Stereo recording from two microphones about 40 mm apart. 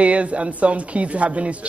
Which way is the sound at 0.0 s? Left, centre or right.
Right.